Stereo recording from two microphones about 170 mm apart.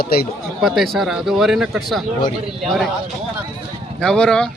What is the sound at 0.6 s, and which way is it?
Speech, centre (ahead or behind).